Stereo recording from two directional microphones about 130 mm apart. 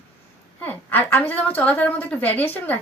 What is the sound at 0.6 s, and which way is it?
A woman's voice, 15° left (ahead or behind).